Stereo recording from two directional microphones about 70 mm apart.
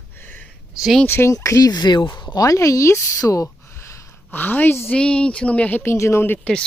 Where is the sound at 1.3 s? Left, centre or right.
Left.